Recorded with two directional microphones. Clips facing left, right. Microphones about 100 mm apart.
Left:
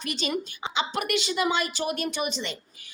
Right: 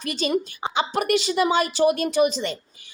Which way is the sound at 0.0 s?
40° right (ahead or behind).